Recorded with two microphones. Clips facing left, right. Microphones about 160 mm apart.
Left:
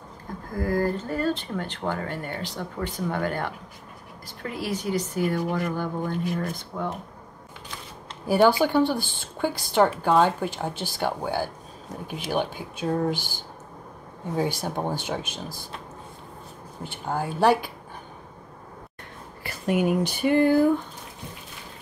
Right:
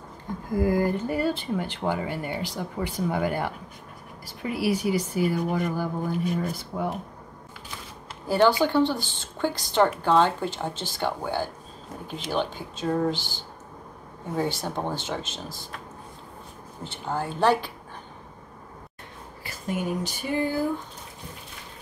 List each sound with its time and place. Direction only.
0.6 s speech: 15° right (ahead or behind)
8.3 s speech: 10° left (ahead or behind)
16.8 s speech: 15° left (ahead or behind)
19.4 s speech: 70° left (ahead or behind)